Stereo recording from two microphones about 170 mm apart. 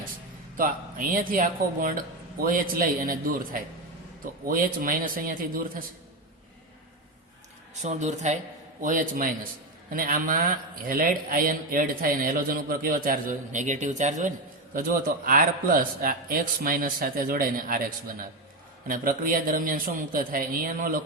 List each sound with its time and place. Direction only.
0.5 s a man's voice: 55° right (ahead or behind)
7.8 s a man's voice: 45° right (ahead or behind)